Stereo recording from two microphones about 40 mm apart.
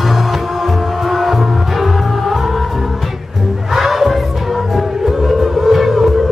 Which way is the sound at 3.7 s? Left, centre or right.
Centre.